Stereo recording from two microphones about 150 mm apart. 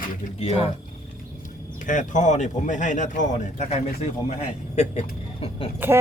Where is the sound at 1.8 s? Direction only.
55° left (ahead or behind).